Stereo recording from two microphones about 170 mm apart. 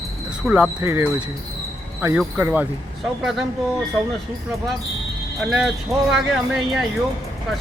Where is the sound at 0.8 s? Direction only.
15° right (ahead or behind).